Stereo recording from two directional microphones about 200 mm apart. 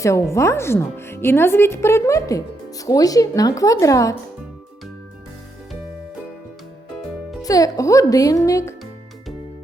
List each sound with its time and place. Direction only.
0.0 s a woman's voice: 15° left (ahead or behind)
7.4 s a woman's voice: 15° left (ahead or behind)